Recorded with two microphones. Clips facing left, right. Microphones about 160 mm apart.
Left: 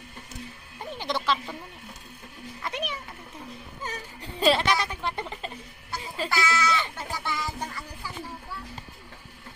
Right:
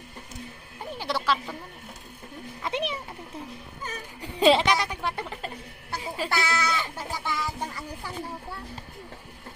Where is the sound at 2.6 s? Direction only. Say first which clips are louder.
Right 4 dB; 25° right (ahead or behind).